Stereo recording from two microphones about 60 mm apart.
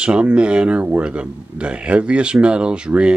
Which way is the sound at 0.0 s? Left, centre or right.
Centre.